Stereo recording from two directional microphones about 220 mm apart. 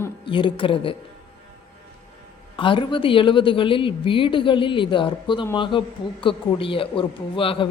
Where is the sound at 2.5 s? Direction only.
20° left (ahead or behind).